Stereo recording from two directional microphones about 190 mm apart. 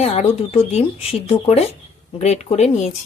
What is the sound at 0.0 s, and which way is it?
Speech, 35° left (ahead or behind).